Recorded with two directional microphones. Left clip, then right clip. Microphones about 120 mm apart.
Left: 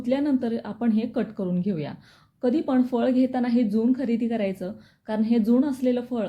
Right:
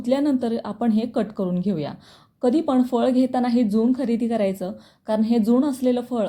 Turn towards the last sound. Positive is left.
turn(degrees=-40)  # may be behind; listen again after turning